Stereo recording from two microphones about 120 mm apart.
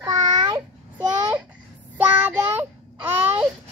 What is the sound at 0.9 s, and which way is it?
Babbling, 10° right (ahead or behind).